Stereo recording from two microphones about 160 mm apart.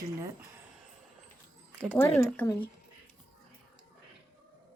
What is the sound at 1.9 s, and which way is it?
Speech, 15° left (ahead or behind).